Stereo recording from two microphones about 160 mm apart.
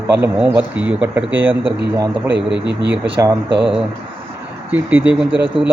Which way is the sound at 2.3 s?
90° right.